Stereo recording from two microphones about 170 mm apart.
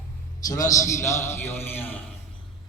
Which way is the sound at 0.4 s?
20° left (ahead or behind).